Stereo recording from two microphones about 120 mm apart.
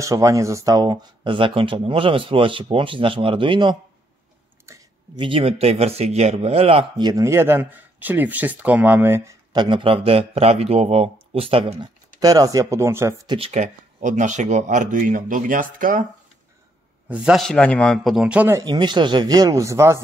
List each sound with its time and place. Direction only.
0.0 s speech: 30° right (ahead or behind); by 3.7 s 45° right (ahead or behind)
5.1 s a man's voice: 45° right (ahead or behind)
7.0 s speech: 35° right (ahead or behind)
7.2 s speech: 20° right (ahead or behind)
9.6 s speech: 40° right (ahead or behind)
12.2 s speech: 30° right (ahead or behind)
13.5 s speech: 75° right (ahead or behind); by 15.1 s 90° right
17.1 s speech: 5° right (ahead or behind)
17.5 s speech: 10° left (ahead or behind); by 18.5 s 10° right (ahead or behind)
18.5 s speech: 35° right (ahead or behind)